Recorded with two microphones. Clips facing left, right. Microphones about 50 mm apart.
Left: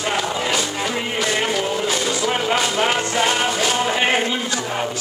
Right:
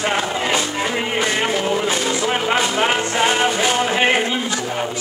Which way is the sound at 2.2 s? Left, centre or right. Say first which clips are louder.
Right 1 dB; centre.